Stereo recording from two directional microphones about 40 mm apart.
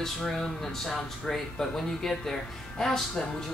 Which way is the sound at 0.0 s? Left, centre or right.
Centre.